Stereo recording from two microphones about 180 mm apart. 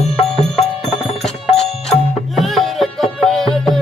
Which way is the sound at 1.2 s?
Centre (ahead or behind).